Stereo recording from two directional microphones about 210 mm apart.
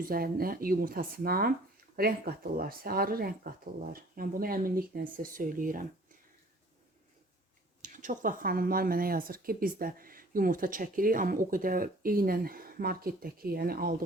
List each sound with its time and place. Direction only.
0.0 s speech: 45° right (ahead or behind)
7.8 s speech: 40° right (ahead or behind)